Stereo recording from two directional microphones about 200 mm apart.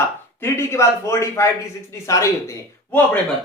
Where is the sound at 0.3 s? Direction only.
15° left (ahead or behind).